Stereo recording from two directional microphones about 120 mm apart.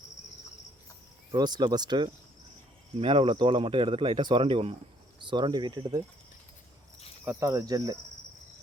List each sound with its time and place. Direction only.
1.3 s speech: 35° right (ahead or behind)
3.0 s speech: 45° right (ahead or behind)
7.3 s cricket: 25° right (ahead or behind)